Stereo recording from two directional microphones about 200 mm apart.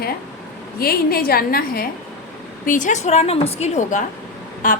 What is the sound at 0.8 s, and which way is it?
A woman's voice, 50° left (ahead or behind).